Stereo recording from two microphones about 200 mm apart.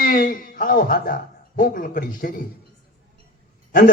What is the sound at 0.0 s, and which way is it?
Speech, 45° left (ahead or behind).